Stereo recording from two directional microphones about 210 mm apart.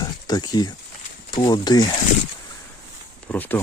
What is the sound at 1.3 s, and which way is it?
Speech, 20° left (ahead or behind).